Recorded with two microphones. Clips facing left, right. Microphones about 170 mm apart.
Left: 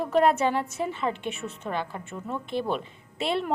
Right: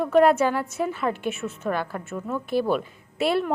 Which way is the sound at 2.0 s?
5° right (ahead or behind).